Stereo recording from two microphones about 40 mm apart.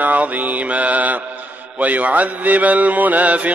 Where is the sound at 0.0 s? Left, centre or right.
Right.